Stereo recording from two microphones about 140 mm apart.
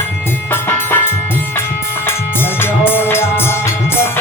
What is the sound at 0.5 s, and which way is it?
Music, 15° left (ahead or behind).